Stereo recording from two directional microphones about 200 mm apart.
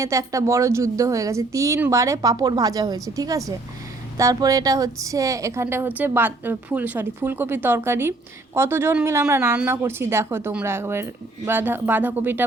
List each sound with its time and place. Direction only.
0.0 s a woman's voice: 15° right (ahead or behind)